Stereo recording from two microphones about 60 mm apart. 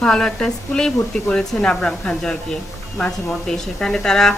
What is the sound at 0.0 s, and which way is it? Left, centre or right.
A woman's voice, centre.